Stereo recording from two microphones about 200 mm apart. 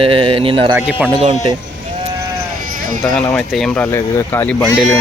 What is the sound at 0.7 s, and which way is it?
Speech, 5° right (ahead or behind).